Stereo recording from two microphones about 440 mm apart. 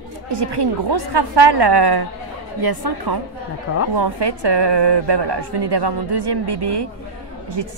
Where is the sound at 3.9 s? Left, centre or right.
Right.